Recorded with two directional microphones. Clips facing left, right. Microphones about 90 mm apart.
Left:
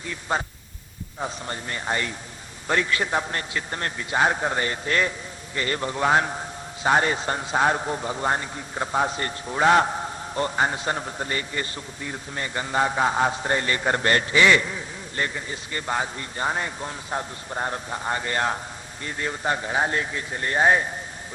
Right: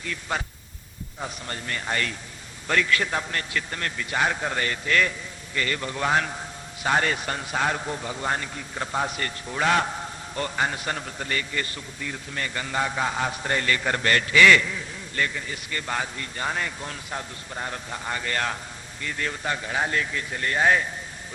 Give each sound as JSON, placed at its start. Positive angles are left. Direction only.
{"t": 0.0, "sound": "a man's voice", "side_deg": 25}